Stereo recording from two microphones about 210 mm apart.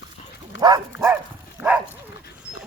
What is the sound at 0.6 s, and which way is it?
Dog, 15° right (ahead or behind).